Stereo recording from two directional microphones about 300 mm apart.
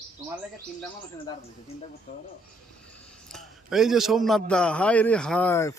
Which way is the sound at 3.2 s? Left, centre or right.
Centre.